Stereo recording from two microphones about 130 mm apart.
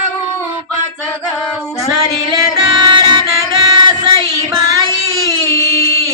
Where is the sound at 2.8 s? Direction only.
35° right (ahead or behind).